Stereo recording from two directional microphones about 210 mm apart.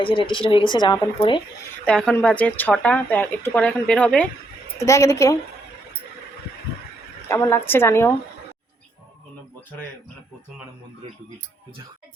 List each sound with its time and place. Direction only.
0.0 s speech: 25° left (ahead or behind)
1.8 s speech: 5° left (ahead or behind)
7.3 s speech: 15° left (ahead or behind)